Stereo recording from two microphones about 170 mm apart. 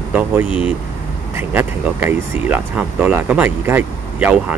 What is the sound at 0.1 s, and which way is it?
Speech, 10° right (ahead or behind).